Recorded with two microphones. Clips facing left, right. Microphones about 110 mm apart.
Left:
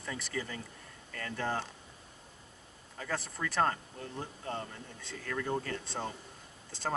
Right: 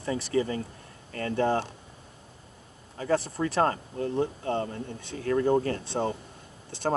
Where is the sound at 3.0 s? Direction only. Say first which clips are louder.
Right 10 dB; 30° right (ahead or behind).